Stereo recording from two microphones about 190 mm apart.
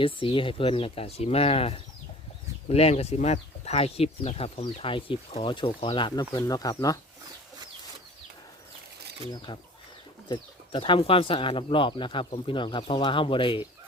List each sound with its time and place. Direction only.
0.0 s speech: 25° left (ahead or behind)
9.5 s speech: 25° left (ahead or behind)